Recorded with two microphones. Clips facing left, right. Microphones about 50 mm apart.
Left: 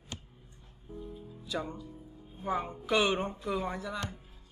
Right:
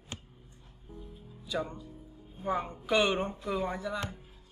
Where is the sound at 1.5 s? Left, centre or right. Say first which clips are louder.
Right 2 dB; centre.